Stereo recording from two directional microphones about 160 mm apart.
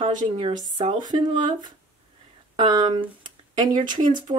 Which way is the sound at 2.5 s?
25° right (ahead or behind).